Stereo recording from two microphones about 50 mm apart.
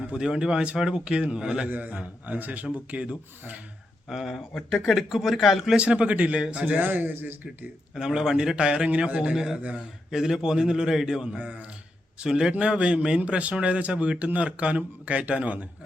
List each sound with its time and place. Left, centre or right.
0.0 s speech: centre
4.1 s speech: centre
5.7 s speech: right
6.7 s a man's voice: right
7.9 s a man's voice: centre
9.3 s a man's voice: centre